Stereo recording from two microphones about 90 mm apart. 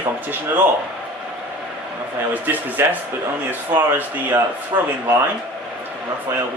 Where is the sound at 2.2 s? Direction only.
20° right (ahead or behind).